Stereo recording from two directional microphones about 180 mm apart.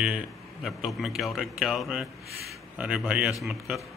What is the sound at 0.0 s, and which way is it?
A man's voice, 5° right (ahead or behind).